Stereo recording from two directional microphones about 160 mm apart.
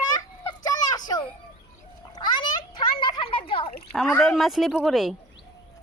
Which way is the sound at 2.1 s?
30° left (ahead or behind).